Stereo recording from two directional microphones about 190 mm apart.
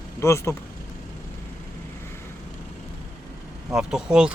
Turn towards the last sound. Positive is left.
turn(degrees=-5)  # may be behind; listen again after turning